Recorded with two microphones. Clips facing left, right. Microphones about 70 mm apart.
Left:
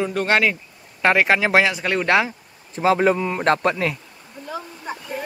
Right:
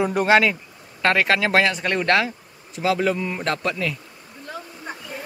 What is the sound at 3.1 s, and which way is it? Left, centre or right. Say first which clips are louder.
Speech: left 3 dB; left.